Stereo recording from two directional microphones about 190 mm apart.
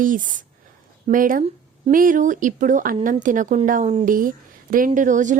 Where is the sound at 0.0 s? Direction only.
45° right (ahead or behind).